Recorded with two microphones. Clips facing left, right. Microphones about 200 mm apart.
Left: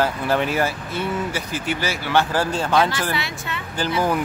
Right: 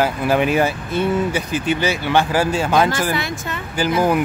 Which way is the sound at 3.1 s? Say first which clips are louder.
Right 4 dB; 45° right (ahead or behind).